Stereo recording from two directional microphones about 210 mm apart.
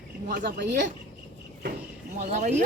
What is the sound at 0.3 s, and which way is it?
Speech, 45° right (ahead or behind).